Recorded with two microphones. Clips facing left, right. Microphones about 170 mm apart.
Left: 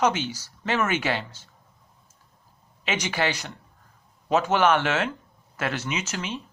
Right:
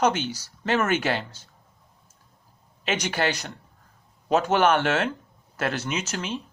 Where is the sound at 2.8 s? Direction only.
45° right (ahead or behind).